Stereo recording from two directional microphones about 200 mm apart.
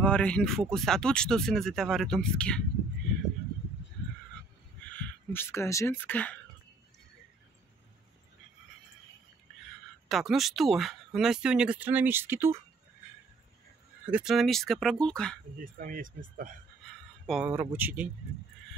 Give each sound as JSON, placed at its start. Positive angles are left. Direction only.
{"t": 0.0, "sound": "speech", "side_deg": 5}
{"t": 4.9, "sound": "speech", "side_deg": 10}
{"t": 10.0, "sound": "speech", "side_deg": 0}
{"t": 14.1, "sound": "speech", "side_deg": 0}
{"t": 15.6, "sound": "speech", "side_deg": -45}
{"t": 17.3, "sound": "speech", "side_deg": -5}